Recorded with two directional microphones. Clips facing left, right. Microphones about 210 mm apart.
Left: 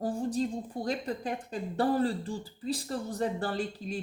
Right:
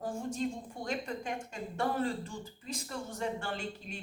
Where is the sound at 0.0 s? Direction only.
35° left (ahead or behind).